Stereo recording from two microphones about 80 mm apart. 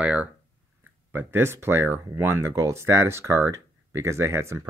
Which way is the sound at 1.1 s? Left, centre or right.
Right.